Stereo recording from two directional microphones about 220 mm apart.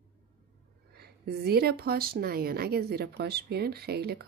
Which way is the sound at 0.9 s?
45° right (ahead or behind).